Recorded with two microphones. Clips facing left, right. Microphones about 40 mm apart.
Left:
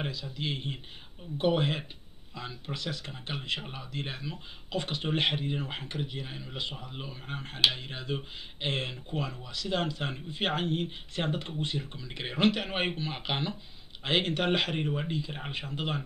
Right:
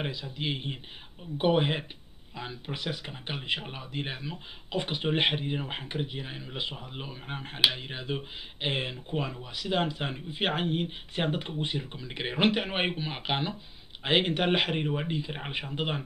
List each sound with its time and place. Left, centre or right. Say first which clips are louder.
0.0 s speech: right 2 dB; centre